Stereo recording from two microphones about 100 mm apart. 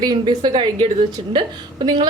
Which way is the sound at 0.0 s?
45° right (ahead or behind).